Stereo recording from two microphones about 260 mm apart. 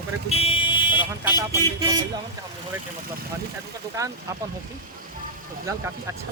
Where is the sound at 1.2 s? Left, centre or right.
Centre.